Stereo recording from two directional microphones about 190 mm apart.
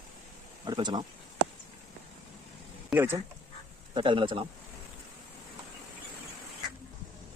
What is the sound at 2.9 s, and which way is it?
Speech, 10° right (ahead or behind).